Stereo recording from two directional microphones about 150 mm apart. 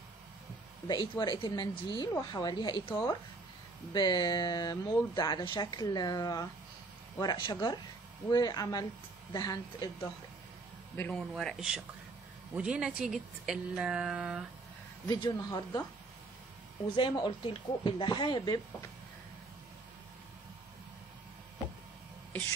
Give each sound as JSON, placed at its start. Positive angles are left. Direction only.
{"t": 0.8, "sound": "speech", "side_deg": 30}
{"t": 11.0, "sound": "a woman's voice", "side_deg": 5}
{"t": 15.0, "sound": "speech", "side_deg": 30}
{"t": 16.9, "sound": "speech", "side_deg": 30}